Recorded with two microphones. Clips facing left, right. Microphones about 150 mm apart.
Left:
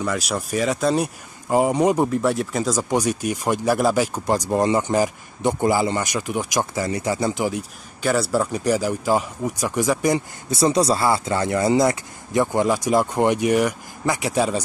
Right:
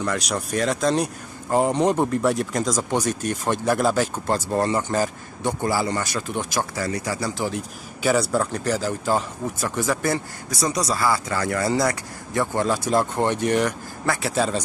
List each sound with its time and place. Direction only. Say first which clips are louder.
0.0 s speech: left 1 dB; 5° left (ahead or behind); by 7.5 s 20° left (ahead or behind)
8.0 s speech: even; centre (ahead or behind); by 10.6 s 15° left (ahead or behind)
10.6 s speech: left 5 dB; 25° left (ahead or behind)